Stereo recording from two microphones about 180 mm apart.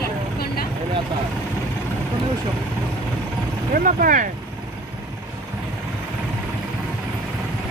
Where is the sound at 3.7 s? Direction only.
50° right (ahead or behind).